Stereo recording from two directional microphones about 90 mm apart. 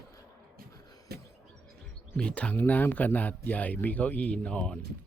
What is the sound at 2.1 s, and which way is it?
Speech, 15° left (ahead or behind).